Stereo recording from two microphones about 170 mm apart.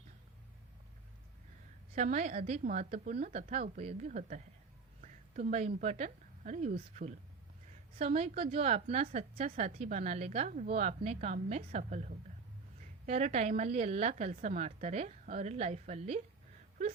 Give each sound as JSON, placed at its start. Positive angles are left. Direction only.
{"t": 2.0, "sound": "a woman's voice", "side_deg": -45}